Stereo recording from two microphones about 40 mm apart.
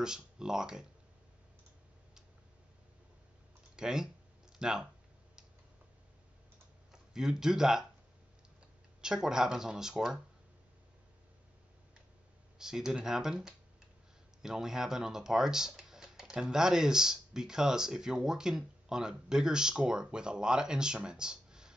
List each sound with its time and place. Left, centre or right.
0.0 s speech: centre
3.7 s a sound: centre
6.9 s speech: centre
9.0 s speech: centre
12.5 s speech: centre